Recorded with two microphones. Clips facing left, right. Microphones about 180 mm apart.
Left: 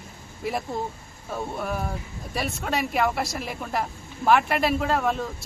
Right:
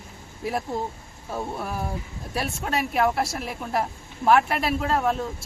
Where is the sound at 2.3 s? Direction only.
Centre (ahead or behind).